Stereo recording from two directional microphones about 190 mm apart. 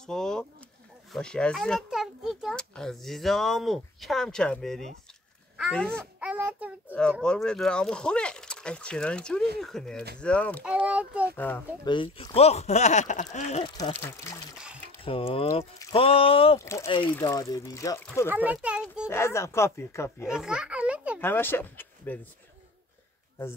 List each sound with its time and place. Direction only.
0.0 s bird: 5° left (ahead or behind)
1.1 s a child's voice: 5° left (ahead or behind)
5.6 s a sound: 5° left (ahead or behind)
6.9 s speech: 5° left (ahead or behind)
10.6 s a child's voice: 5° right (ahead or behind)
11.3 s speech: 10° left (ahead or behind)
11.8 s speech: 25° left (ahead or behind)
13.9 s speech: 10° left (ahead or behind)
15.0 s speech: 30° left (ahead or behind)
16.5 s speech: 15° left (ahead or behind)
18.3 s a sound: 10° right (ahead or behind)
19.0 s speech: 15° left (ahead or behind)
20.2 s a sound: 5° right (ahead or behind)
21.2 s speech: 10° left (ahead or behind)